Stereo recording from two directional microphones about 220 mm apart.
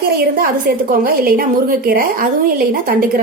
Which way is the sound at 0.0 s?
40° right (ahead or behind).